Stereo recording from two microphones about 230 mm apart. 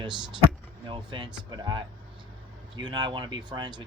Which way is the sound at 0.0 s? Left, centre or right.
Centre.